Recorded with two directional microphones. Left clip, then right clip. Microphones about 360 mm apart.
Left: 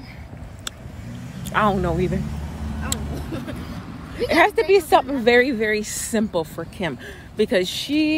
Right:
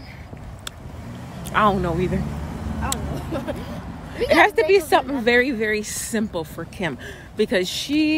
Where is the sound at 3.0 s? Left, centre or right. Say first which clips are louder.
Right 2 dB; right.